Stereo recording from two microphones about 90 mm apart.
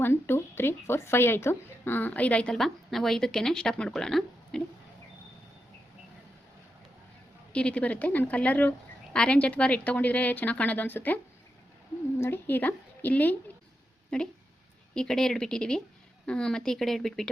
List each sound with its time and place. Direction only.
0.0 s a woman's voice: 25° left (ahead or behind); by 4.6 s 5° left (ahead or behind)
7.5 s a woman's voice: 15° left (ahead or behind)
12.2 s a woman's voice: 25° left (ahead or behind); by 17.2 s 5° left (ahead or behind)